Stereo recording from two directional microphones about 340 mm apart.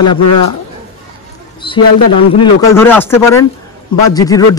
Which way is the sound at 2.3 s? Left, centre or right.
Centre.